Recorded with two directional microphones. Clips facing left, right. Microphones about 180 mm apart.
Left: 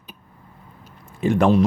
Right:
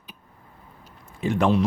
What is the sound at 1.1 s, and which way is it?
Speech, 50° left (ahead or behind).